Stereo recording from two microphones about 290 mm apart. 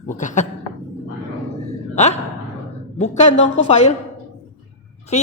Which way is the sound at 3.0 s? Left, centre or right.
Left.